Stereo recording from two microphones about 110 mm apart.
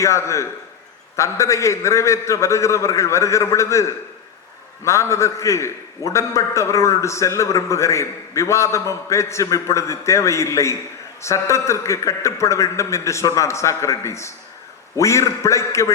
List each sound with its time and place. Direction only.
0.0 s a man's voice: 25° left (ahead or behind)